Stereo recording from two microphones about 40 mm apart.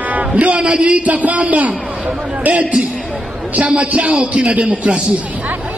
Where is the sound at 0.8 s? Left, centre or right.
Right.